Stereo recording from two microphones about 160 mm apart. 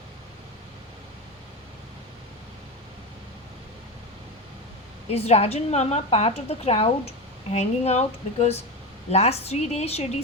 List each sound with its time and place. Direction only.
5.1 s a woman's voice: 40° left (ahead or behind)